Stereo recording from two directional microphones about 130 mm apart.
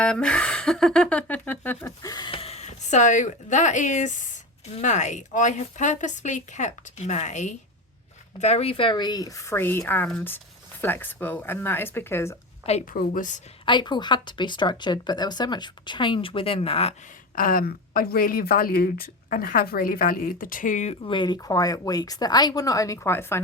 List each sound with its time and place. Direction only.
0.0 s speech: 10° left (ahead or behind)
2.0 s speech: 30° left (ahead or behind)
2.3 s speech: 50° left (ahead or behind); by 7.5 s 65° left (ahead or behind)
8.4 s a woman's voice: 55° left (ahead or behind); by 12.4 s 20° left (ahead or behind)
12.9 s a woman's voice: 90° left
13.7 s speech: 35° left (ahead or behind)
17.3 s a woman's voice: 90° left; by 20.9 s 75° left (ahead or behind)
21.0 s a woman's voice: 40° left (ahead or behind); by 23.4 s 20° left (ahead or behind)